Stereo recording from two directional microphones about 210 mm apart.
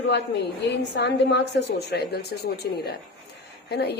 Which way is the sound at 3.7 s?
50° left (ahead or behind).